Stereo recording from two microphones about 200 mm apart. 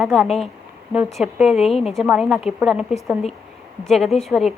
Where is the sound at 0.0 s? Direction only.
Centre (ahead or behind).